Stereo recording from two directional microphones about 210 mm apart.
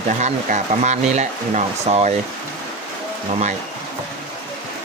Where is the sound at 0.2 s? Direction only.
35° right (ahead or behind).